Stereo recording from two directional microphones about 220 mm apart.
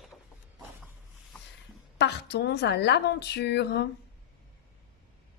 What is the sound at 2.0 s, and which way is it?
A woman's voice, 50° left (ahead or behind).